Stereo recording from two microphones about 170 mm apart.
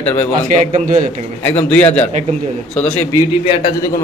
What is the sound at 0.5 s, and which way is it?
Speech, 45° right (ahead or behind).